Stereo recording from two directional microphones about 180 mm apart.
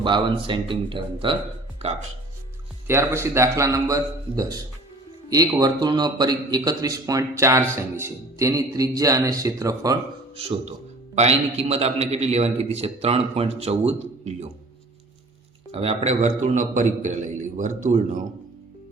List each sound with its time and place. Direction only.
0.0 s a man's voice: 25° right (ahead or behind)
2.8 s a man's voice: 15° right (ahead or behind)
10.3 s a man's voice: 35° right (ahead or behind)
15.7 s a man's voice: 35° right (ahead or behind)